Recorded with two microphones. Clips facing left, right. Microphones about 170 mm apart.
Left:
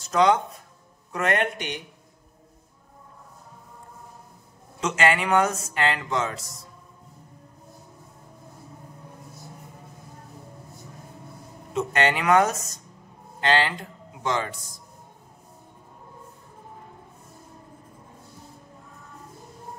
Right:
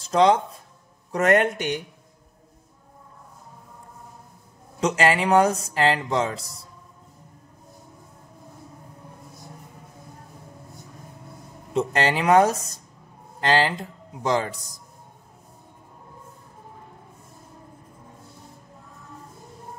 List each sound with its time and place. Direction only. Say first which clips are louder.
0.0 s speech: right 2 dB; 30° right (ahead or behind)
1.1 s speech: right 5 dB; 45° right (ahead or behind)
4.7 s speech: right 2 dB; 35° right (ahead or behind)
11.7 s speech: right 1 dB; 35° right (ahead or behind)